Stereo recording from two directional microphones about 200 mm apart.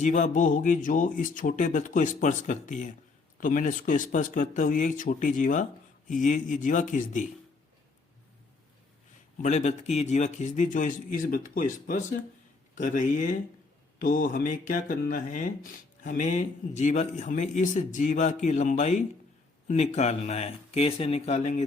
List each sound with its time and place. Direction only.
0.0 s speech: 40° left (ahead or behind)
9.4 s speech: 35° left (ahead or behind)